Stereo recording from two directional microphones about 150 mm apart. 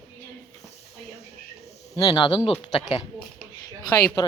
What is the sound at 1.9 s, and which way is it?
Speech, 25° left (ahead or behind).